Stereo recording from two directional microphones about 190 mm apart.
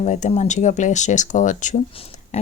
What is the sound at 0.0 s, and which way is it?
Speech, 40° left (ahead or behind).